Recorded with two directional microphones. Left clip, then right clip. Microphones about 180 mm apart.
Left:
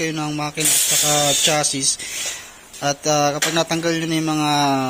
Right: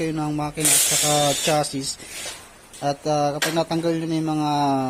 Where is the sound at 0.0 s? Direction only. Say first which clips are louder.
Left 2 dB; 15° right (ahead or behind).